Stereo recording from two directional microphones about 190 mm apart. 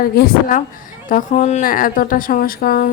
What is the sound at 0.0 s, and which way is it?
A woman's voice, 50° left (ahead or behind).